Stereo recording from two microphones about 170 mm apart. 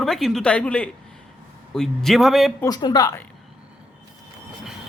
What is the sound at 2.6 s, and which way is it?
Speech, 25° left (ahead or behind).